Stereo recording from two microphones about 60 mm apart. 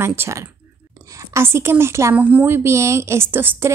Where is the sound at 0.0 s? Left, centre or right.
Right.